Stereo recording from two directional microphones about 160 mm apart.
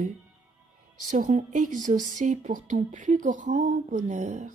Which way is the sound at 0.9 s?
55° right (ahead or behind).